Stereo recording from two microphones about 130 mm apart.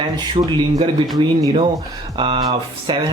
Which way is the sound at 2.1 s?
45° right (ahead or behind).